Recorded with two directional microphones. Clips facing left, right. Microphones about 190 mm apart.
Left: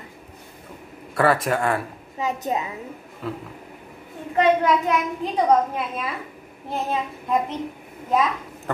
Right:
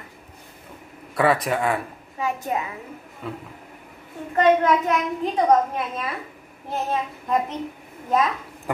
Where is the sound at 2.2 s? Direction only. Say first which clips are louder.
Left 1 dB; 20° left (ahead or behind).